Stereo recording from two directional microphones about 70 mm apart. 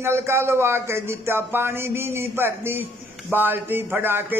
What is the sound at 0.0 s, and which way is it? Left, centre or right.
Speech, right.